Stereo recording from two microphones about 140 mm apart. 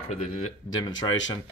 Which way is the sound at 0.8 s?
30° left (ahead or behind).